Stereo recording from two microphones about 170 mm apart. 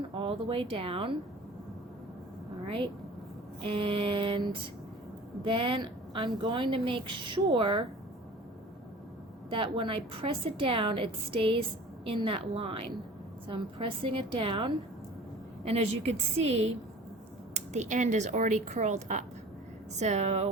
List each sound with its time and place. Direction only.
0.2 s a woman's voice: 30° right (ahead or behind)
3.6 s a woman's voice: 30° right (ahead or behind)
5.5 s a woman's voice: 30° right (ahead or behind)
9.5 s a woman's voice: 30° right (ahead or behind)